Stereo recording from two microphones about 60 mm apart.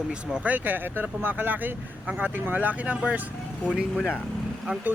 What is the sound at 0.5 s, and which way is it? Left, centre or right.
Speech, right.